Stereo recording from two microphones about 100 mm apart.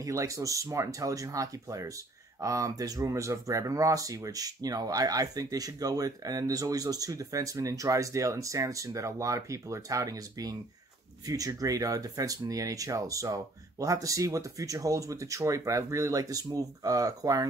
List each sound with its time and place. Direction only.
0.0 s speech: 30° right (ahead or behind)